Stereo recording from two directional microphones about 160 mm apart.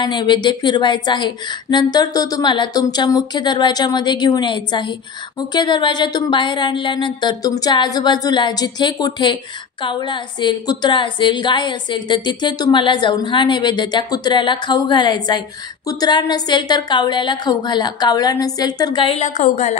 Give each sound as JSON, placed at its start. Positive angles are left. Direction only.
{"t": 0.0, "sound": "a woman's voice", "side_deg": 25}